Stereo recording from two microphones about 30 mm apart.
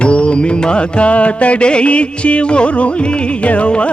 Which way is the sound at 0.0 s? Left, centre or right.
Left.